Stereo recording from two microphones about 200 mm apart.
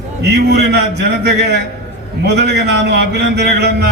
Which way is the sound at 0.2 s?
55° right (ahead or behind).